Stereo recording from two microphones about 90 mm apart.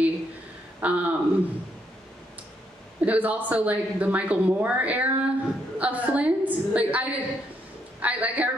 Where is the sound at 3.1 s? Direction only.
20° right (ahead or behind).